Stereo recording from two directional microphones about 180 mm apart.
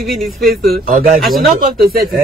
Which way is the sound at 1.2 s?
Centre (ahead or behind).